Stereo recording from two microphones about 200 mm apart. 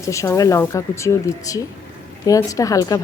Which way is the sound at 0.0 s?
15° left (ahead or behind).